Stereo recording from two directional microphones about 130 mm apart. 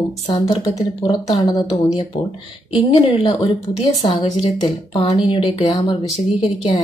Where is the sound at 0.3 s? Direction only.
30° left (ahead or behind).